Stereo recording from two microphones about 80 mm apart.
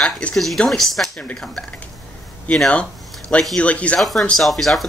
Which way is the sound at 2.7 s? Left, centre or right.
Centre.